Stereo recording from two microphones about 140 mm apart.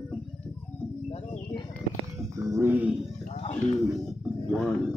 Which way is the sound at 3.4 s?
55° left (ahead or behind).